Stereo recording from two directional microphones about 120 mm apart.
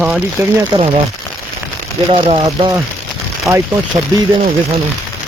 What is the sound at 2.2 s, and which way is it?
Speech, 50° right (ahead or behind).